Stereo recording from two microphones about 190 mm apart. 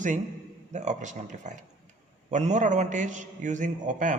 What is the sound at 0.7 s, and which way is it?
Speech, 40° right (ahead or behind).